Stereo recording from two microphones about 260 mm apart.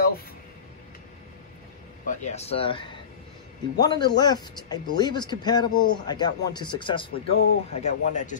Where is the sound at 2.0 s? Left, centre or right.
Left.